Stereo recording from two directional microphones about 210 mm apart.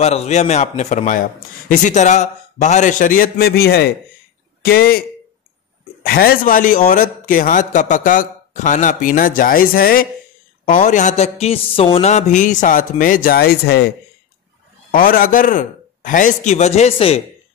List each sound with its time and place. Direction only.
0.0 s a man's voice: 30° left (ahead or behind); by 5.0 s 45° left (ahead or behind)
6.0 s a man's voice: 45° left (ahead or behind); by 17.2 s 30° left (ahead or behind)